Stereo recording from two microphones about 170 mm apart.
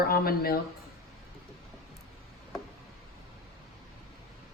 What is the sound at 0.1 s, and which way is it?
Speech, 60° left (ahead or behind).